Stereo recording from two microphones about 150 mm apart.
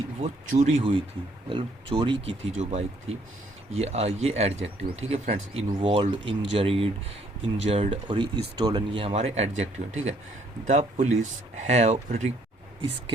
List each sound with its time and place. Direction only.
0.2 s speech: 50° right (ahead or behind); by 2.3 s 30° right (ahead or behind)
2.6 s speech: 45° right (ahead or behind)